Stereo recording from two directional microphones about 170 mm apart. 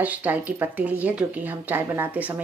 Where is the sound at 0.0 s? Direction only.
10° right (ahead or behind).